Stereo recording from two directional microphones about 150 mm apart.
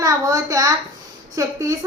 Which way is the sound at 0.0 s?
25° right (ahead or behind).